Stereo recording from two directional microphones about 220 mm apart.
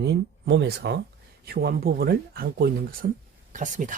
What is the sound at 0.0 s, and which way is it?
Speech, 50° right (ahead or behind).